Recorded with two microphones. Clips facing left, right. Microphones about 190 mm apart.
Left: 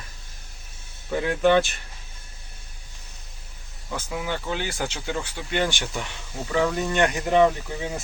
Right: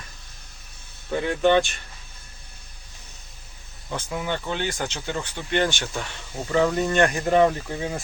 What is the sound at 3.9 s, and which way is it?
Speech, 5° left (ahead or behind).